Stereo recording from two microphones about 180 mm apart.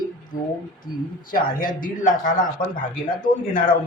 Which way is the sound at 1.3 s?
50° left (ahead or behind).